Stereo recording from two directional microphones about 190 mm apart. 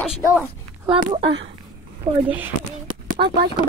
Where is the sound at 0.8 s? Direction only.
25° right (ahead or behind).